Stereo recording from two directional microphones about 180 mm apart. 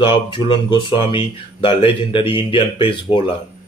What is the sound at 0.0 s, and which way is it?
Speech, 25° left (ahead or behind).